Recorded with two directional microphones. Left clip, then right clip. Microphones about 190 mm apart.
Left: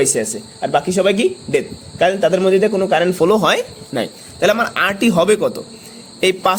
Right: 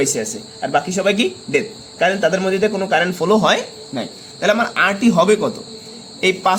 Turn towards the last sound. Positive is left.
turn(degrees=40)  # may be behind; listen again after turning